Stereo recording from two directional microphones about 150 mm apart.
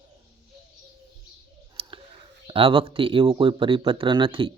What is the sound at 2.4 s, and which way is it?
Speech, 35° right (ahead or behind).